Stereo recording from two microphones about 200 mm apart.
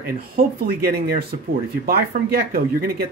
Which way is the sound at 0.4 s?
50° right (ahead or behind).